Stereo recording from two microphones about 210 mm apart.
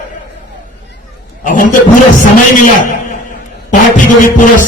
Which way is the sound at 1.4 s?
40° left (ahead or behind).